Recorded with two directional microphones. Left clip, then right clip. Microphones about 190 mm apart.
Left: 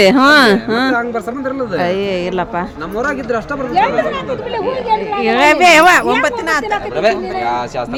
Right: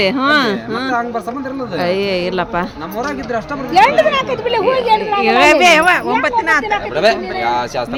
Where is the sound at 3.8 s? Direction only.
30° right (ahead or behind).